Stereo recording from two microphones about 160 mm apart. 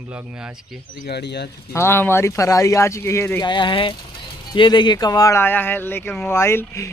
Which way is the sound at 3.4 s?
30° left (ahead or behind).